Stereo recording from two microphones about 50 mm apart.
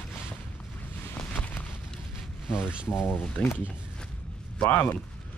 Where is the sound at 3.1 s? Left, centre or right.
Left.